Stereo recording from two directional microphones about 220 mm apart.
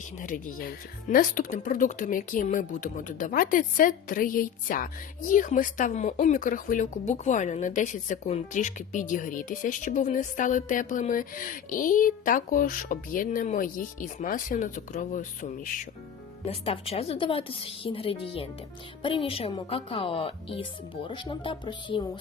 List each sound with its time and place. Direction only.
0.2 s speech: 35° left (ahead or behind); by 22.2 s 20° left (ahead or behind)